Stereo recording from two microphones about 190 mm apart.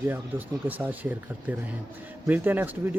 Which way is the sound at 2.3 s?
10° right (ahead or behind).